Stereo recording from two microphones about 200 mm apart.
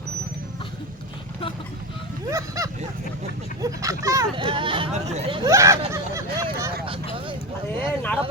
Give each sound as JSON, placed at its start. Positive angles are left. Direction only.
{"t": 3.6, "sound": "speech", "side_deg": -15}
{"t": 5.4, "sound": "speech", "side_deg": -15}
{"t": 7.8, "sound": "speech", "side_deg": 10}